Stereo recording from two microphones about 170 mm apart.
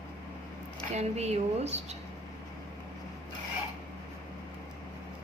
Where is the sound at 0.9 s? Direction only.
40° right (ahead or behind).